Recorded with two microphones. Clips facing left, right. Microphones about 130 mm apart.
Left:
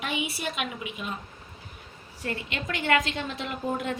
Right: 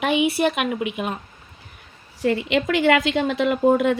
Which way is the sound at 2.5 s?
90° right.